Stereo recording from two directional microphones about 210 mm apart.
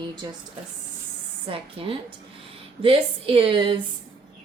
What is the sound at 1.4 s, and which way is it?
A woman's voice, 25° right (ahead or behind).